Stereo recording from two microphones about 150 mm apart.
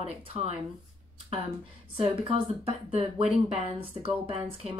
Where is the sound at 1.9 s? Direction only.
40° right (ahead or behind).